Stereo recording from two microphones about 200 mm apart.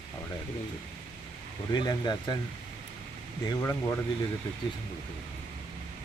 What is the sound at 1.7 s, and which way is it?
Speech, 20° left (ahead or behind).